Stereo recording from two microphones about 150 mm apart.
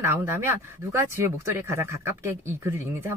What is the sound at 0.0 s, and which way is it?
Speech, 15° right (ahead or behind).